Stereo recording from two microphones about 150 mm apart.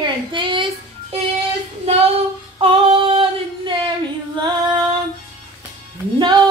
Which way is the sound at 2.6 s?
35° right (ahead or behind).